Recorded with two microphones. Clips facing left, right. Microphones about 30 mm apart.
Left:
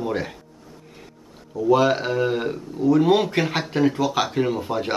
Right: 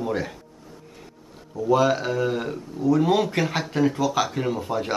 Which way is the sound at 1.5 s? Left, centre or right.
Centre.